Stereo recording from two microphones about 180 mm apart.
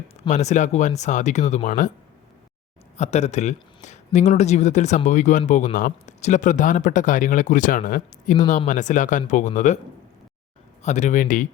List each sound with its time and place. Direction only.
0.2 s speech: 40° left (ahead or behind)
3.0 s speech: 40° left (ahead or behind)
10.8 s speech: 40° left (ahead or behind)